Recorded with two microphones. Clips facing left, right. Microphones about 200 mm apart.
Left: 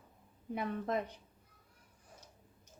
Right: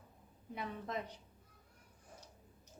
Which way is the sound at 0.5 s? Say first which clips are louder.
Left 6 dB; 55° left (ahead or behind).